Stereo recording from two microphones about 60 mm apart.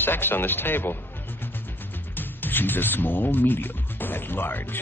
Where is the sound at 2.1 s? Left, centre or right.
Left.